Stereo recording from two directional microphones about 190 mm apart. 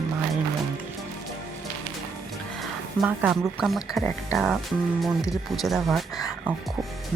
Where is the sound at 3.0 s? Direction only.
Centre (ahead or behind).